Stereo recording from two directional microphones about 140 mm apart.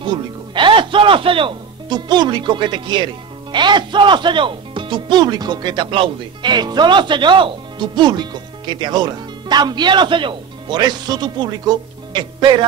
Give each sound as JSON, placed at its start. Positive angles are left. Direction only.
{"t": 0.0, "sound": "speech", "side_deg": -35}